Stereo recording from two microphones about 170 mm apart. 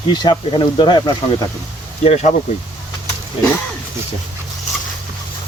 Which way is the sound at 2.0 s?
40° left (ahead or behind).